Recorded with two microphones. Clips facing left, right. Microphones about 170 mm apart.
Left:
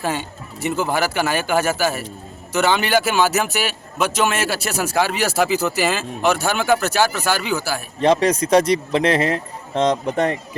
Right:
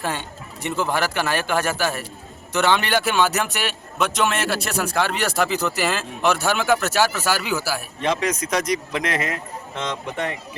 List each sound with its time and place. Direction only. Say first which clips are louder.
0.0 s a man's voice: left 3 dB; 5° left (ahead or behind)
8.0 s a man's voice: left 7 dB; 35° left (ahead or behind)